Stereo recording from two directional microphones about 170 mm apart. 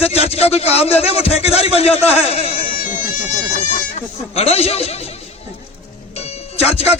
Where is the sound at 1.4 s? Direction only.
35° left (ahead or behind).